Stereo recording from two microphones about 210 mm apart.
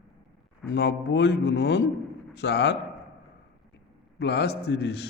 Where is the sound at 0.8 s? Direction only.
55° left (ahead or behind).